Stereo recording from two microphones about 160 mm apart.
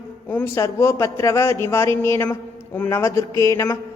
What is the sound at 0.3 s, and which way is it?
A man's voice, 15° left (ahead or behind).